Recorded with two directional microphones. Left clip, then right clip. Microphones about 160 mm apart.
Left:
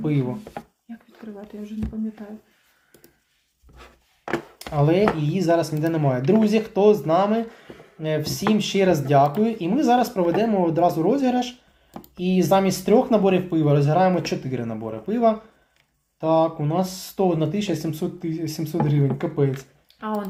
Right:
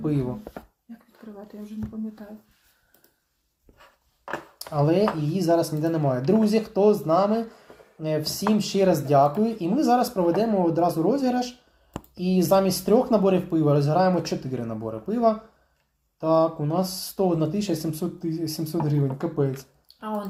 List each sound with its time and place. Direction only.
0.0 s speech: 20° right (ahead or behind)
4.5 s speech: 20° right (ahead or behind)
20.0 s speech: 15° left (ahead or behind)